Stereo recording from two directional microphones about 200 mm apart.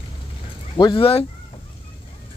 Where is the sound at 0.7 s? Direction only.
20° left (ahead or behind).